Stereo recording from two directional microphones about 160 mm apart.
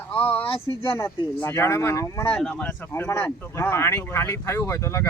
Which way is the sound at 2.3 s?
5° left (ahead or behind).